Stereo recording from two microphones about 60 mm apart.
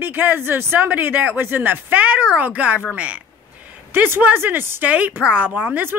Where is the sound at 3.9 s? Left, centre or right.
Right.